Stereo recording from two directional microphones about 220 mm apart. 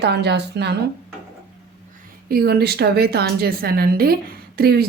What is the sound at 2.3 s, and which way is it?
A woman's voice, 45° right (ahead or behind).